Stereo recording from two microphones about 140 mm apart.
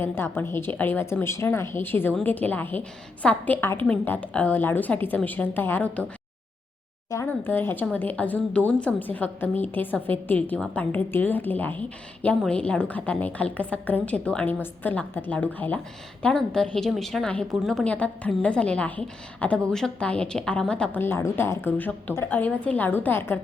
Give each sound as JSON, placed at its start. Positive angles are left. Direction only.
{"t": 0.0, "sound": "speech", "side_deg": 15}
{"t": 7.1, "sound": "a woman's voice", "side_deg": 20}